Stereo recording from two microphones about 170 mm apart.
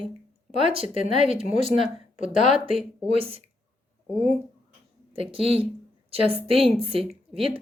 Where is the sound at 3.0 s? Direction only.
35° right (ahead or behind).